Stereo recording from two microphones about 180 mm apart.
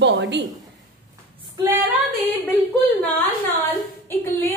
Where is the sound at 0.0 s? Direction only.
75° right (ahead or behind).